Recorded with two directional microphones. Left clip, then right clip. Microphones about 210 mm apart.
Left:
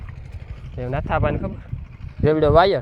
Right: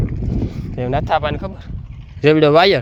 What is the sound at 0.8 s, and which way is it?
Speech, 40° right (ahead or behind).